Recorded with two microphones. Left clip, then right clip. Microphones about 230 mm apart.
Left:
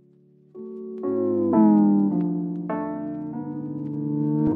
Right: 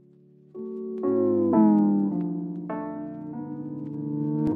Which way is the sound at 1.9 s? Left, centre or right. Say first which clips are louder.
Left 4 dB; left.